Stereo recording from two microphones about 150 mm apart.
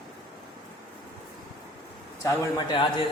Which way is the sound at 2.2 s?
20° left (ahead or behind).